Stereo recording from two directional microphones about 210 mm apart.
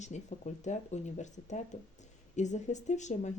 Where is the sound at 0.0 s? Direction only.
35° left (ahead or behind).